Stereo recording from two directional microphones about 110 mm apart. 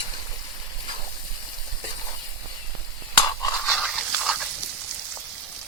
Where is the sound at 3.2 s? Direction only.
35° left (ahead or behind).